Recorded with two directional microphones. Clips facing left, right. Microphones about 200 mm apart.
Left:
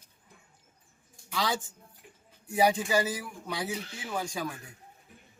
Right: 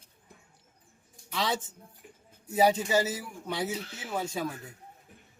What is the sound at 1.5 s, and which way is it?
Speech, 20° right (ahead or behind).